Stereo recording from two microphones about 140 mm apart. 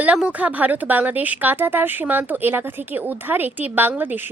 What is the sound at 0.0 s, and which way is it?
Speech, 10° right (ahead or behind).